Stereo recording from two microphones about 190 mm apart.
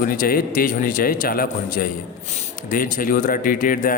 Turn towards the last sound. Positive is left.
turn(degrees=45)  # may be behind; listen again after turning